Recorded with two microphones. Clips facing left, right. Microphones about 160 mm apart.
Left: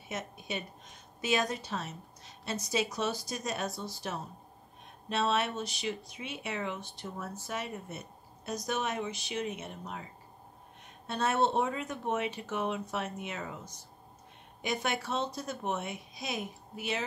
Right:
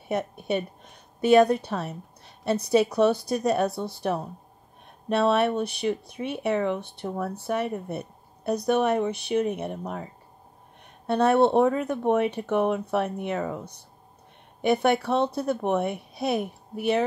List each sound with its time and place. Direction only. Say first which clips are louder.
0.1 s speech: right 11 dB; 60° right (ahead or behind)
11.1 s speech: right 9 dB; 60° right (ahead or behind)